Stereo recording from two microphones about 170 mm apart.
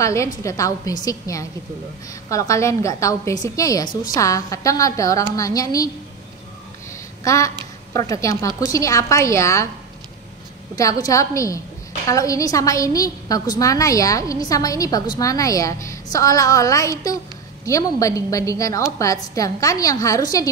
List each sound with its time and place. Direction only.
0.0 s a woman's voice: 15° left (ahead or behind)
7.2 s a woman's voice: 20° left (ahead or behind)
10.8 s a woman's voice: 20° left (ahead or behind)